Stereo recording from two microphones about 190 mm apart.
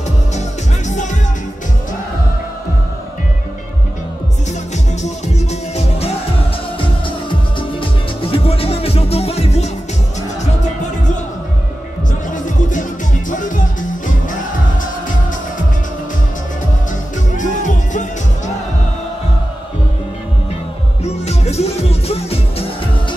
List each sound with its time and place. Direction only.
0.8 s music: 40° left (ahead or behind)
5.0 s music: 35° left (ahead or behind)
7.5 s music: 30° left (ahead or behind)
13.3 s music: 45° left (ahead or behind)
17.4 s music: 40° left (ahead or behind)
21.0 s music: 35° left (ahead or behind)